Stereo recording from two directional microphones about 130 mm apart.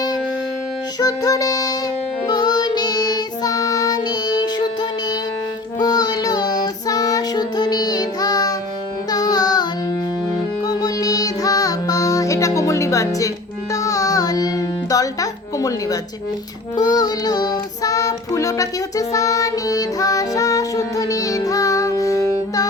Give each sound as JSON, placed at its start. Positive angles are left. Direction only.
{"t": 0.9, "sound": "music", "side_deg": 30}
{"t": 5.8, "sound": "child singing", "side_deg": 30}
{"t": 9.0, "sound": "carnatic music", "side_deg": 30}
{"t": 10.7, "sound": "music", "side_deg": 30}
{"t": 16.7, "sound": "child singing", "side_deg": 30}